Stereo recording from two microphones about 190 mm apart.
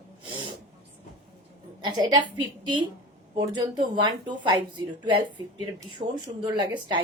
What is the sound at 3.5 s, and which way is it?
Speech, 25° right (ahead or behind).